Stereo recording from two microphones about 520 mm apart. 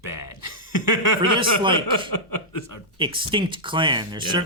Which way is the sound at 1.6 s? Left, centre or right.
Centre.